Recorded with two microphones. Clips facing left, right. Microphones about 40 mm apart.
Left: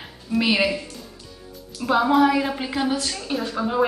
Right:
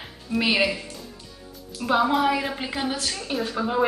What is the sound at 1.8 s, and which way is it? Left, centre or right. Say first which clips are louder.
A woman's voice: left 3 dB; centre.